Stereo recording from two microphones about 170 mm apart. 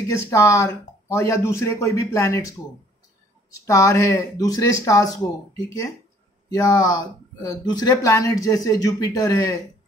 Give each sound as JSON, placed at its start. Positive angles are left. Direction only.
{"t": 0.1, "sound": "speech", "side_deg": 15}
{"t": 3.5, "sound": "speech", "side_deg": 20}